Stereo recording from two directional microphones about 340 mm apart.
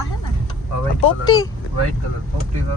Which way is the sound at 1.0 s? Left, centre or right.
Centre.